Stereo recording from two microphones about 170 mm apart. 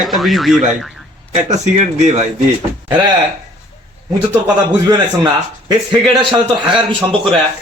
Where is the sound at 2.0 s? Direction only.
40° right (ahead or behind).